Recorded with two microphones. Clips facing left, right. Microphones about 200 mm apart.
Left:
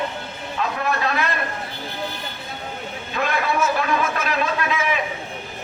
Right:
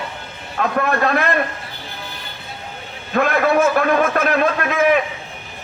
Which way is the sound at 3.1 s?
55° right (ahead or behind).